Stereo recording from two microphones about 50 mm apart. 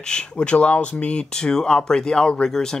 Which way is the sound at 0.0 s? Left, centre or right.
Centre.